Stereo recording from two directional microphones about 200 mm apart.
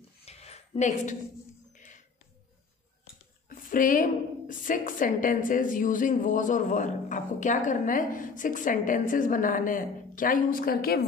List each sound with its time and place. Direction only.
0.2 s a sound: 30° left (ahead or behind)
1.8 s music: 40° left (ahead or behind)
3.4 s a woman's voice: 45° left (ahead or behind)